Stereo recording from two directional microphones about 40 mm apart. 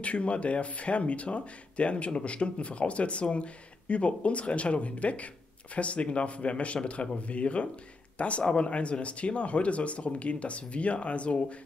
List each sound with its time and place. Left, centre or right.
0.0 s speech: left